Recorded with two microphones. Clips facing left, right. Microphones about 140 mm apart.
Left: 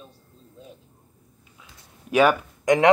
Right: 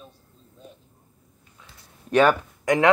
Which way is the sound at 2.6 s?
20° left (ahead or behind).